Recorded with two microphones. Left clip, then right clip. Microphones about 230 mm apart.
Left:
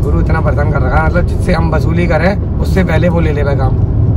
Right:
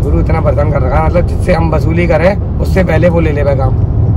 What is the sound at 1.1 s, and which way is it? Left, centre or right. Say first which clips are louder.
Speech: right 3 dB; centre.